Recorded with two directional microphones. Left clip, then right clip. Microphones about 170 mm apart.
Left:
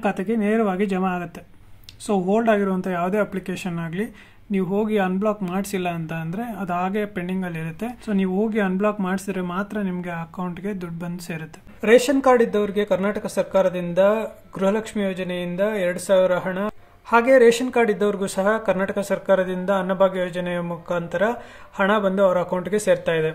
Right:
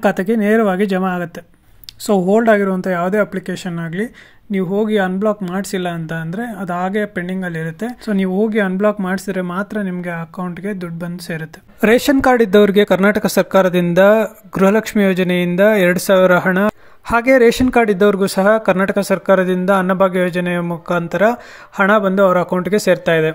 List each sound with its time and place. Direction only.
0.0 s speech: 40° right (ahead or behind)
11.8 s speech: 50° right (ahead or behind)